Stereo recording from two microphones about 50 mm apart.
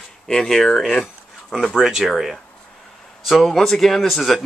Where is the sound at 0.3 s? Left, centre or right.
Centre.